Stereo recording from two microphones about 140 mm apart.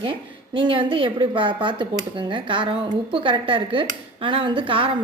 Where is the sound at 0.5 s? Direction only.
35° right (ahead or behind).